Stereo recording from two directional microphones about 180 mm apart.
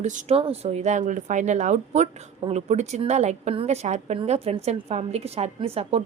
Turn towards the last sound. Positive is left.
turn(degrees=-35)  # may be behind; listen again after turning